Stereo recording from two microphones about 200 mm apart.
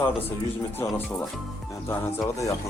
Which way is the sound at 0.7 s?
10° left (ahead or behind).